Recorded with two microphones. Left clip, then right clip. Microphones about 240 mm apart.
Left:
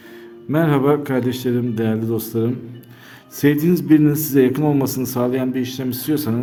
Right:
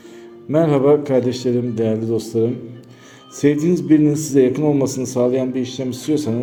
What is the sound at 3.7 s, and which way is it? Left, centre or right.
Speech, left.